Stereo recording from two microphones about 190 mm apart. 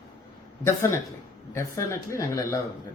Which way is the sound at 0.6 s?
15° left (ahead or behind).